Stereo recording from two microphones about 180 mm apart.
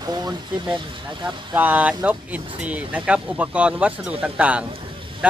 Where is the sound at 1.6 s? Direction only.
10° right (ahead or behind).